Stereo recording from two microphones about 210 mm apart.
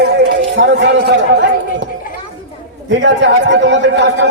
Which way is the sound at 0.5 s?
55° right (ahead or behind).